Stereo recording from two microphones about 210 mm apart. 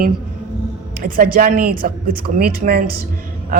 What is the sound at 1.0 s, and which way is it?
A woman's voice, 45° right (ahead or behind).